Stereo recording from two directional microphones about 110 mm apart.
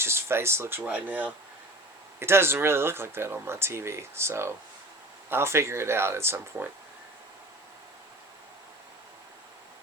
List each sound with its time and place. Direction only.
0.0 s speech: 25° right (ahead or behind)